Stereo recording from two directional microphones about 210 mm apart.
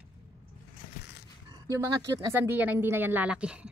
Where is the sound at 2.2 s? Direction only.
10° right (ahead or behind).